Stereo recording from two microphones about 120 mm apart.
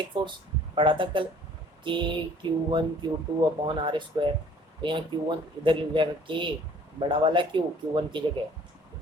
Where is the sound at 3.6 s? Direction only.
40° right (ahead or behind).